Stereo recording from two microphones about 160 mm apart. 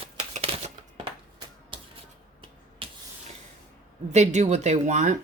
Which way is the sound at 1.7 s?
30° right (ahead or behind).